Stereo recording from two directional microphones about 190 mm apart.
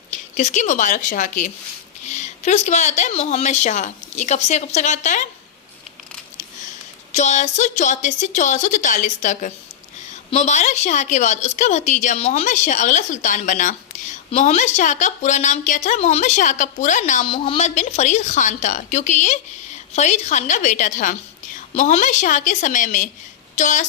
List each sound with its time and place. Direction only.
0.3 s a woman's voice: 40° left (ahead or behind)
7.1 s a woman's voice: 35° left (ahead or behind)
17.2 s a woman's voice: 30° left (ahead or behind)